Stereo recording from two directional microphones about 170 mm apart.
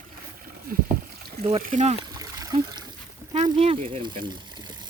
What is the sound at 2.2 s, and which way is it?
Trickle, 20° right (ahead or behind).